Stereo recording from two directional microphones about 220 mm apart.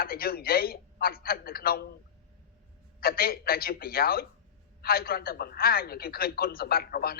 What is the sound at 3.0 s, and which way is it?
A woman's voice, 45° left (ahead or behind).